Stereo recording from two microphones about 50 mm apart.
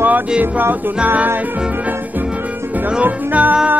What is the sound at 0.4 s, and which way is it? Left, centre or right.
Music, right.